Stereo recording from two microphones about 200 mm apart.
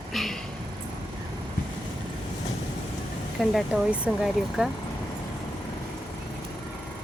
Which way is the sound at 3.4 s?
Centre (ahead or behind).